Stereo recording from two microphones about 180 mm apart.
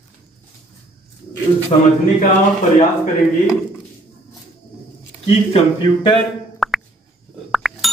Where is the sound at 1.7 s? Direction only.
30° left (ahead or behind).